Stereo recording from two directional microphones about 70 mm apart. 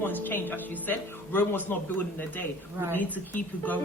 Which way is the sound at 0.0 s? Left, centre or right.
Left.